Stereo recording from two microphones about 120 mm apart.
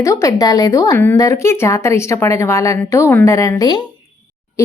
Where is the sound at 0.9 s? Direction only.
15° left (ahead or behind); by 3.8 s 35° left (ahead or behind).